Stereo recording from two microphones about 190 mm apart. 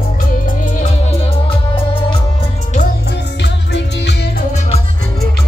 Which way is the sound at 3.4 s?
65° left (ahead or behind).